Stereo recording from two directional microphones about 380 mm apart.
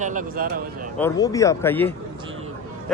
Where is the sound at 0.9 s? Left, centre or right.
Centre.